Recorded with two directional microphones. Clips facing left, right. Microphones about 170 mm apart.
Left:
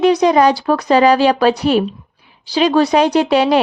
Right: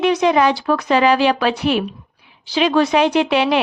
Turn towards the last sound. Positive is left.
turn(degrees=40)  # may be behind; listen again after turning